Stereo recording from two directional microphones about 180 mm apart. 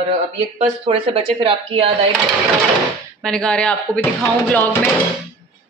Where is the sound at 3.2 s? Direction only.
5° left (ahead or behind).